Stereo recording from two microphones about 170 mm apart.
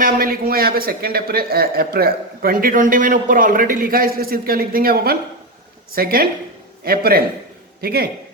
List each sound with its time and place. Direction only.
0.0 s a man's voice: 60° right (ahead or behind)